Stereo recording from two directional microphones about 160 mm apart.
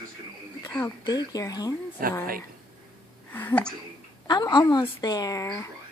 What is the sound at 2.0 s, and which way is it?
Speech, 65° right (ahead or behind).